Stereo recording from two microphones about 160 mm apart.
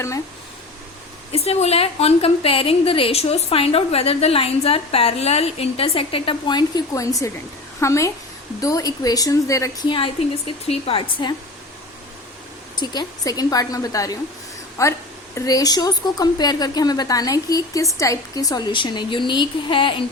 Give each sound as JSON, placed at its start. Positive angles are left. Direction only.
{"t": 1.3, "sound": "a woman's voice", "side_deg": 40}
{"t": 10.7, "sound": "a woman's voice", "side_deg": 35}
{"t": 12.7, "sound": "speech", "side_deg": 25}